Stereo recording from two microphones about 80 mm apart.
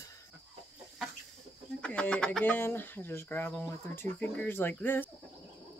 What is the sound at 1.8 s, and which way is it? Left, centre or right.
Speech, centre.